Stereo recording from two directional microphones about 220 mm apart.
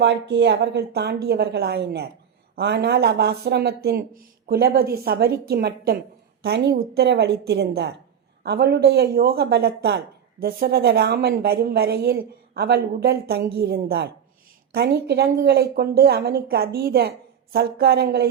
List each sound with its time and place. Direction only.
0.0 s speech: 50° right (ahead or behind)